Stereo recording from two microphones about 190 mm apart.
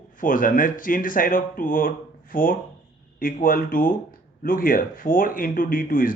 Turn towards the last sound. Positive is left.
turn(degrees=45)  # may be behind; listen again after turning